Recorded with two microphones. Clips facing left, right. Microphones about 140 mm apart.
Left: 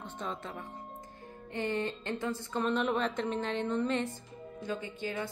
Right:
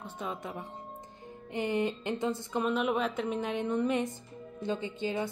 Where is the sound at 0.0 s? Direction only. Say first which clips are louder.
Right 1 dB; 10° right (ahead or behind).